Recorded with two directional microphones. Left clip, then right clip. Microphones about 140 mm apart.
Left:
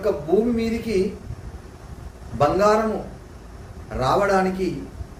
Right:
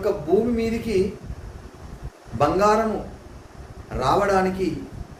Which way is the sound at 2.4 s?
15° right (ahead or behind).